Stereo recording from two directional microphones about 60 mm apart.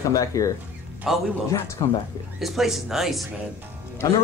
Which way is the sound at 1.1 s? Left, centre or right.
Centre.